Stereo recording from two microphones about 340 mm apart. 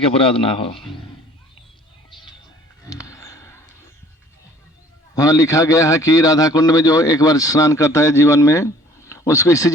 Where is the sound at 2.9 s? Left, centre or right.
Centre.